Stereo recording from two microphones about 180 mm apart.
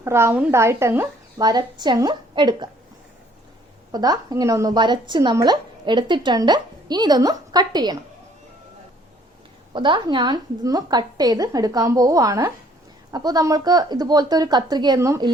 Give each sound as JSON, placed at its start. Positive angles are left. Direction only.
{"t": 0.0, "sound": "a woman's voice", "side_deg": -15}
{"t": 3.9, "sound": "a woman's voice", "side_deg": -20}
{"t": 9.7, "sound": "a woman's voice", "side_deg": -25}